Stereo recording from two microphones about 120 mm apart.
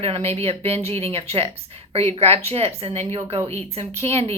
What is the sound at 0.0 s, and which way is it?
A woman's voice, 60° right (ahead or behind).